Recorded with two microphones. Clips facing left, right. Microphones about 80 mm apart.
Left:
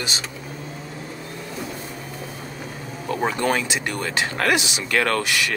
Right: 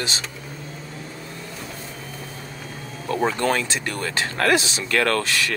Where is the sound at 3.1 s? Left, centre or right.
Centre.